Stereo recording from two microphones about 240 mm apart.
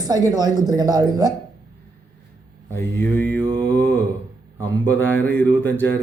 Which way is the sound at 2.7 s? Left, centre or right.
Centre.